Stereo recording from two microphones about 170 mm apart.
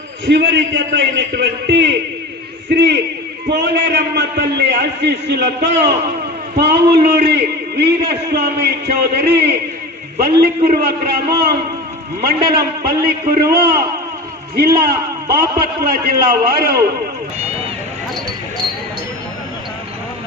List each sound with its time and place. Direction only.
0.3 s a man's voice: 90° right
3.4 s a man's voice: 75° right (ahead or behind)